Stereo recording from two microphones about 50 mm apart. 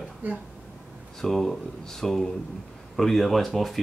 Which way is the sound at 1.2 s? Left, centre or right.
Centre.